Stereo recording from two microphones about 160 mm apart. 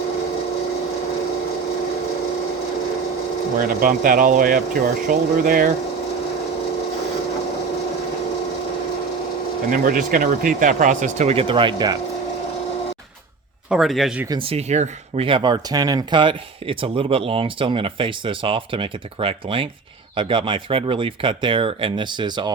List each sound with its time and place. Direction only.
3.6 s a man's voice: 60° right (ahead or behind)
9.6 s speech: 55° right (ahead or behind); by 11.9 s 30° right (ahead or behind)
13.7 s speech: centre (ahead or behind)
14.3 s speech: 35° right (ahead or behind)